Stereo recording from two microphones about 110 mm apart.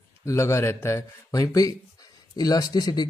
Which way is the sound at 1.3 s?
35° left (ahead or behind).